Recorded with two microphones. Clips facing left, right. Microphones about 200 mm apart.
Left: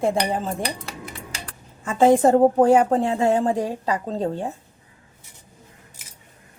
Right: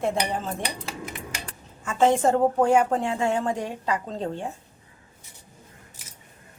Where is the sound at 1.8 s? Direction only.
35° left (ahead or behind).